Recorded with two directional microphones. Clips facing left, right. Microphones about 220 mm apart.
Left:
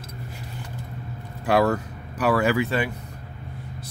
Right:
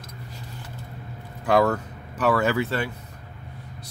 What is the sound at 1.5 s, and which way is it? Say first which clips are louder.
Speech: even; 10° left (ahead or behind).